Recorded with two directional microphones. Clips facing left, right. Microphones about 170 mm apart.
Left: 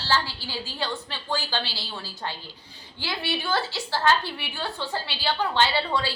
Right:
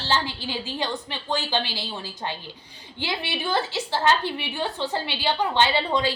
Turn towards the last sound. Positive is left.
turn(degrees=-20)  # may be behind; listen again after turning